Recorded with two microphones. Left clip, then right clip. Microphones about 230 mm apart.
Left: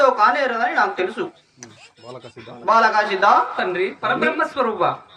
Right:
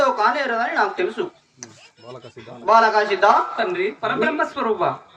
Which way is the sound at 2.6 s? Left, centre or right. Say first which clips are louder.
Right 1 dB; left.